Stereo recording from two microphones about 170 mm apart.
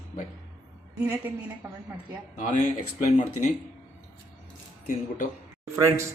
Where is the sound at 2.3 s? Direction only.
45° left (ahead or behind).